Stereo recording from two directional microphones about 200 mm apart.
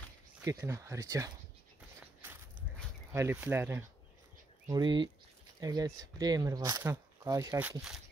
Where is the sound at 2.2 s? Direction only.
10° right (ahead or behind).